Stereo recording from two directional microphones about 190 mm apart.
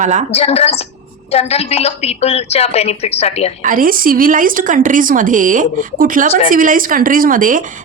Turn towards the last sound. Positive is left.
turn(degrees=-45)  # may be behind; listen again after turning